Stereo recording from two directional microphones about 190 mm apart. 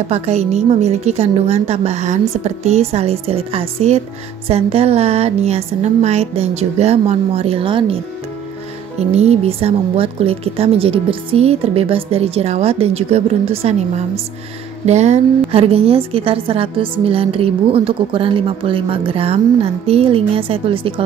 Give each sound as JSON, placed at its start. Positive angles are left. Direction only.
{"t": 0.1, "sound": "a woman's voice", "side_deg": -35}